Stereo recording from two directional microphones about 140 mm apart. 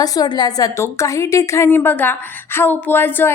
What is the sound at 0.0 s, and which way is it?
A woman's voice, 25° left (ahead or behind).